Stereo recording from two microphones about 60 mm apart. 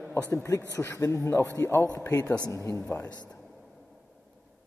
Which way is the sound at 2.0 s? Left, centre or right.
Left.